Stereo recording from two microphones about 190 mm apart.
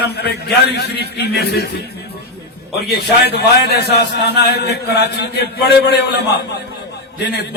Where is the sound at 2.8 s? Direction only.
60° left (ahead or behind).